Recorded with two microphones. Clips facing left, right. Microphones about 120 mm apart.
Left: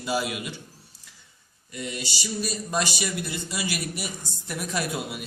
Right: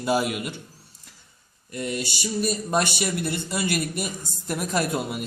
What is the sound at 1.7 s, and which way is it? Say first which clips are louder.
A man's voice: right 5 dB; 50° right (ahead or behind).